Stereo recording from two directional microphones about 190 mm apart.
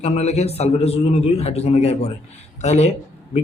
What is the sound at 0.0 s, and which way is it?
A man's voice, 35° left (ahead or behind).